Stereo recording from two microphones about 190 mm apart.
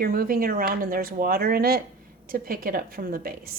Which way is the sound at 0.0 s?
50° right (ahead or behind).